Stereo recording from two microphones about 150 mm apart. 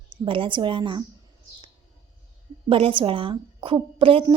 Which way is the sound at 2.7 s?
35° right (ahead or behind).